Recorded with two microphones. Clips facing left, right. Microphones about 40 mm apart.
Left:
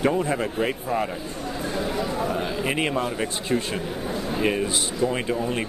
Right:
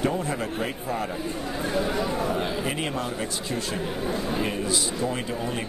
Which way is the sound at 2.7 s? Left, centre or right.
Left.